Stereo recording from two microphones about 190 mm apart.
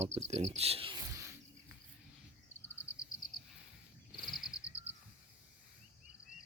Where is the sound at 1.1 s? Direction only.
15° right (ahead or behind).